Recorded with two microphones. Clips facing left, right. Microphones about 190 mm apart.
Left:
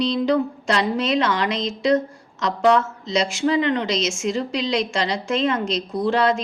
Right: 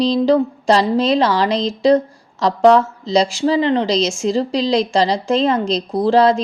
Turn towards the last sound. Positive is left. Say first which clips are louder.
# right 6 dB
turn(degrees=-35)  # may be behind; listen again after turning